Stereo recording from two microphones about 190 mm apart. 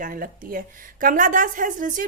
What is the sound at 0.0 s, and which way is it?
A woman's voice, 50° right (ahead or behind).